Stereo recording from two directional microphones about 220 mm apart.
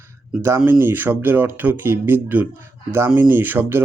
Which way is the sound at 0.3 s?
10° right (ahead or behind).